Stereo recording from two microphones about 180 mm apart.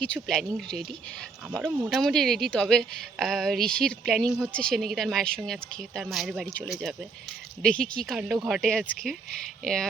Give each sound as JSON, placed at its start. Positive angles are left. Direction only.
{"t": 0.0, "sound": "a woman's voice", "side_deg": 5}